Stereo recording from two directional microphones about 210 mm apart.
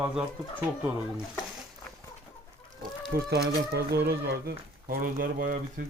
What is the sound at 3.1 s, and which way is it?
Speech, 50° right (ahead or behind).